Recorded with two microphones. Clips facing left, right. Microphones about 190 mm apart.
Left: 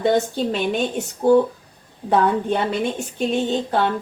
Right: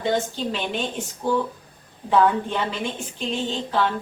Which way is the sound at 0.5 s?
50° left (ahead or behind).